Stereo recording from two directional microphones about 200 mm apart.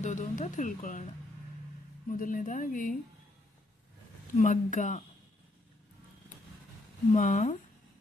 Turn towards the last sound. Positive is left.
turn(degrees=40)  # may be behind; listen again after turning